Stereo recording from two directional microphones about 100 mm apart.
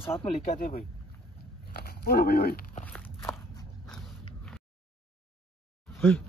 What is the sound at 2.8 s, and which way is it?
Walk, 10° left (ahead or behind).